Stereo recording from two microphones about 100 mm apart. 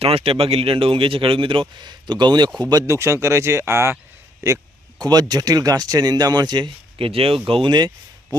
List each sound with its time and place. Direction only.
0.0 s speech: 75° right (ahead or behind); by 2.8 s 45° right (ahead or behind)
2.8 s speech: 30° right (ahead or behind)
4.4 s speech: 35° right (ahead or behind)